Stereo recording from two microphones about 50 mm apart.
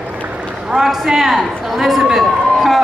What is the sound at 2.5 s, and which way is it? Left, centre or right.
Run, centre.